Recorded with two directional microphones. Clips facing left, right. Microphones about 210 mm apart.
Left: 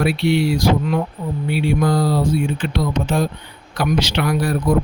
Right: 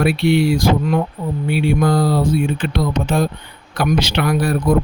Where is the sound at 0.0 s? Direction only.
55° right (ahead or behind).